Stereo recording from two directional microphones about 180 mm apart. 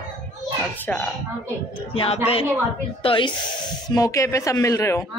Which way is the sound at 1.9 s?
30° left (ahead or behind).